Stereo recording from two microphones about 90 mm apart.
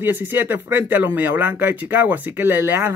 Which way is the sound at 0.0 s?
25° right (ahead or behind).